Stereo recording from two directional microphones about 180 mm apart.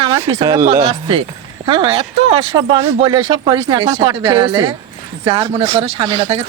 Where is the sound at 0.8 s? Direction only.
30° right (ahead or behind).